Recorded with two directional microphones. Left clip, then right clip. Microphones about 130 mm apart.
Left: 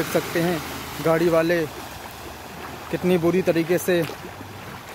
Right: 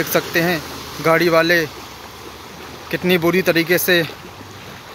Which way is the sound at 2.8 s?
Centre (ahead or behind).